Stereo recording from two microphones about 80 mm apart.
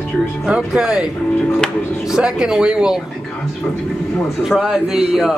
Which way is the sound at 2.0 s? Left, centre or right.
Centre.